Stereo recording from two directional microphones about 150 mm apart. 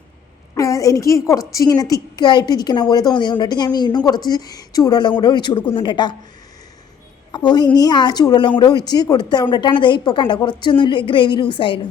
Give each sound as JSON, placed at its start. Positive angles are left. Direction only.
{"t": 0.5, "sound": "a woman's voice", "side_deg": 20}
{"t": 7.3, "sound": "a woman's voice", "side_deg": 30}